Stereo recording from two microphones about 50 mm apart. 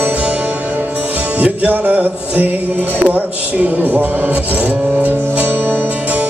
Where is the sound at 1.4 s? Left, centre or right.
Right.